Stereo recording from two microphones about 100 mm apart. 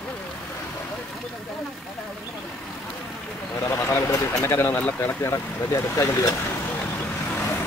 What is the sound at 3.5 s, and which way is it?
Vehicle, 25° left (ahead or behind).